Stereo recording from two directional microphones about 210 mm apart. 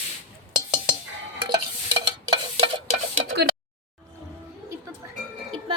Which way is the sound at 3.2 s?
50° right (ahead or behind).